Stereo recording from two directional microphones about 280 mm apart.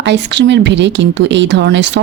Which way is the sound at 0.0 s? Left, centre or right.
Right.